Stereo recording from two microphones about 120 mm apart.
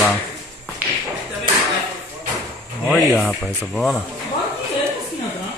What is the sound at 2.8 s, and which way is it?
Speech, centre (ahead or behind).